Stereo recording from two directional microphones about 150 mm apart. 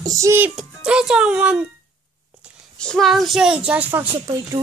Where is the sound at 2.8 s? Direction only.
5° left (ahead or behind).